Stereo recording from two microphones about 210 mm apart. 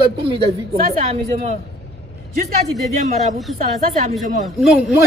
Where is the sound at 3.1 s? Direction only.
35° right (ahead or behind).